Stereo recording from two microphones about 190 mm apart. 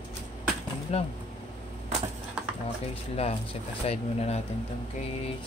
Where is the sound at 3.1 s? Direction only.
30° left (ahead or behind).